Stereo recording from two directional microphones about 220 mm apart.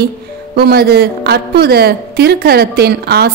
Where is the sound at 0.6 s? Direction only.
45° right (ahead or behind).